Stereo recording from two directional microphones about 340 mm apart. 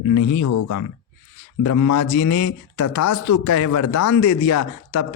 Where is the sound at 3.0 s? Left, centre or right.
Left.